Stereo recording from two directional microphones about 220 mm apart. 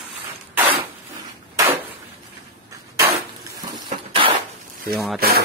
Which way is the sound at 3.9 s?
25° right (ahead or behind).